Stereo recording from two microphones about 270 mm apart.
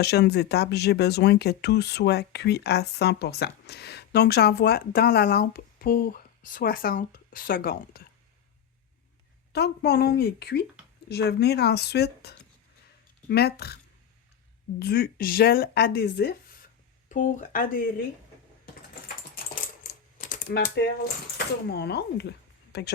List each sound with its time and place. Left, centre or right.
0.0 s speech: left
9.5 s speech: left
14.8 s speech: left
19.8 s speech: left